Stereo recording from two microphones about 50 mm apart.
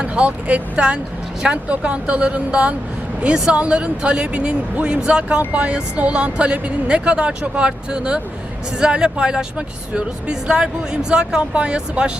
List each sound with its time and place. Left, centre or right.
0.0 s speech: right